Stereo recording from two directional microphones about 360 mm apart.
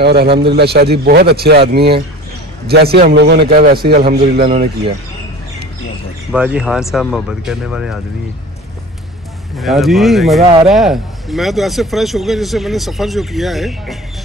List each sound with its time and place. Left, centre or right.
0.0 s a man's voice: right
6.3 s speech: centre
9.6 s speech: centre
10.4 s speech: centre
10.7 s speech: centre